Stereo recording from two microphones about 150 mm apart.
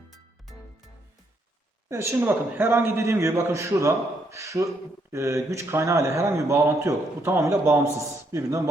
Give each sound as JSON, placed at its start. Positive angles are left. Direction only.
{"t": 1.9, "sound": "a man's voice", "side_deg": -20}